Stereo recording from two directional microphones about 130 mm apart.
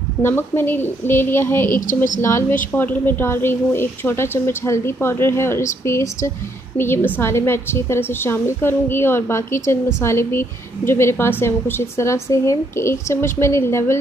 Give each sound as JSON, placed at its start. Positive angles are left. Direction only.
{"t": 0.2, "sound": "a woman's voice", "side_deg": 20}
{"t": 1.7, "sound": "a woman's voice", "side_deg": 80}
{"t": 2.7, "sound": "a woman's voice", "side_deg": 15}